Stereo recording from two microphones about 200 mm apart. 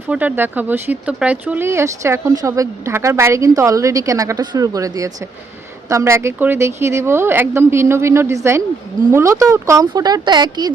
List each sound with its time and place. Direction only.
0.1 s speech: 10° right (ahead or behind)